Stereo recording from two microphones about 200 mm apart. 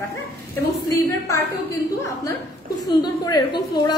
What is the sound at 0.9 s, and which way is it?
A woman's voice, 15° left (ahead or behind).